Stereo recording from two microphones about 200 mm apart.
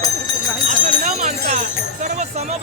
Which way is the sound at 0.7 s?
40° right (ahead or behind).